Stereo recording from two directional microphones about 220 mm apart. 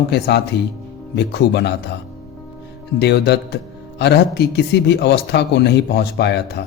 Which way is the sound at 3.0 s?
50° left (ahead or behind).